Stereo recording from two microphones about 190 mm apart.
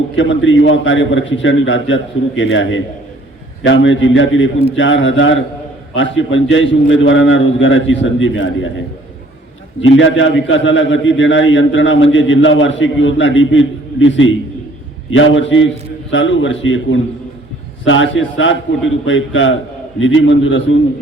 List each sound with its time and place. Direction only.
0.2 s a man's voice: 80° left
9.8 s a man's voice: 75° left (ahead or behind)
20.0 s a man's voice: 90° left